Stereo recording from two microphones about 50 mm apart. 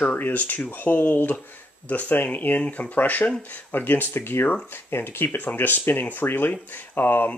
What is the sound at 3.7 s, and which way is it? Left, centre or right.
Speech, left.